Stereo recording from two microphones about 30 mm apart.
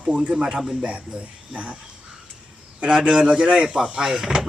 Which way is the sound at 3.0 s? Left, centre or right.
Right.